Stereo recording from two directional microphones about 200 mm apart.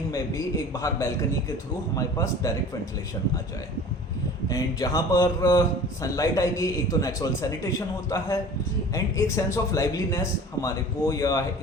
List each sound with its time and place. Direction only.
0.1 s a man's voice: 15° left (ahead or behind)
4.4 s a man's voice: 15° left (ahead or behind)